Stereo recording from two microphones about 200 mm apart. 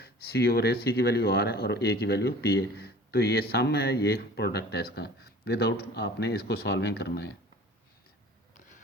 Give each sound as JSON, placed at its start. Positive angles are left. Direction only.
{"t": 0.0, "sound": "speech", "side_deg": 50}